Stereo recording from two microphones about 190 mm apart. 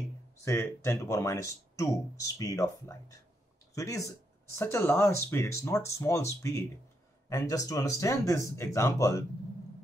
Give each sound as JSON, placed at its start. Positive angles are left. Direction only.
{"t": 0.5, "sound": "speech", "side_deg": 15}